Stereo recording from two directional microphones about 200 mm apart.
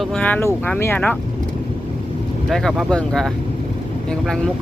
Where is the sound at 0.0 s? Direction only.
5° left (ahead or behind).